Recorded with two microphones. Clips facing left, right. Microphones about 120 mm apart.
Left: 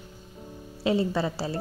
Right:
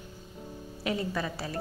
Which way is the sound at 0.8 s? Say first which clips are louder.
Left 7 dB; 25° left (ahead or behind).